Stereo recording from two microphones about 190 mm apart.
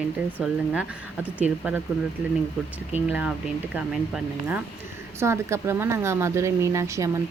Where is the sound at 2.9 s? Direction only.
10° right (ahead or behind).